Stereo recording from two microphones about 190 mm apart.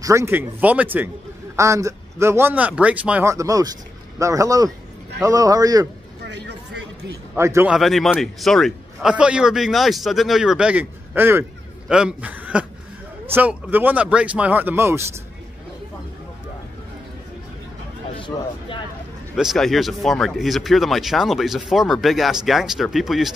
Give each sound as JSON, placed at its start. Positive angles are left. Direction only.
{"t": 0.0, "sound": "a man's voice", "side_deg": -15}
{"t": 6.2, "sound": "a sound", "side_deg": -60}
{"t": 7.3, "sound": "a man's voice", "side_deg": -15}
{"t": 7.7, "sound": "a man's voice", "side_deg": 0}
{"t": 19.3, "sound": "speech", "side_deg": 0}